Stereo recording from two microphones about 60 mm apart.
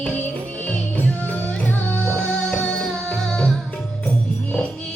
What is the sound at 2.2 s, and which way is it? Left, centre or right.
Music, centre.